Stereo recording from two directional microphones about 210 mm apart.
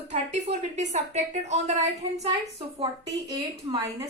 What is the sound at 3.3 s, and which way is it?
Speech, 15° right (ahead or behind).